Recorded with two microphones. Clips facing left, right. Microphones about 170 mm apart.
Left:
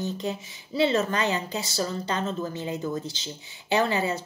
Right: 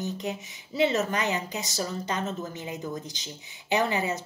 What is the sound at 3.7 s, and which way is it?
Speech, 20° right (ahead or behind).